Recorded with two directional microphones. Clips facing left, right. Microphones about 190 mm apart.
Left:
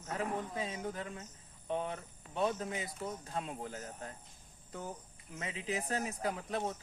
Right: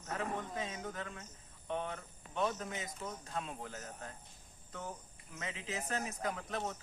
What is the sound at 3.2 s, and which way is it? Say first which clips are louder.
Speech: left 2 dB; 35° left (ahead or behind).